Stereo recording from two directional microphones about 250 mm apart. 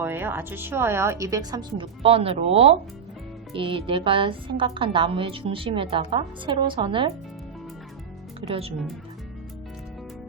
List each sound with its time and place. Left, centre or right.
0.0 s a woman's voice: centre
8.4 s a woman's voice: right